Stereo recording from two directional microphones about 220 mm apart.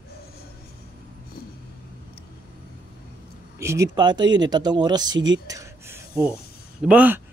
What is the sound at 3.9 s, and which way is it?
Speech, 20° right (ahead or behind).